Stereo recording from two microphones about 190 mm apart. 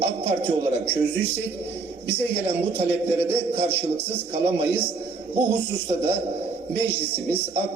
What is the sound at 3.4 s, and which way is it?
A man's voice, 30° right (ahead or behind).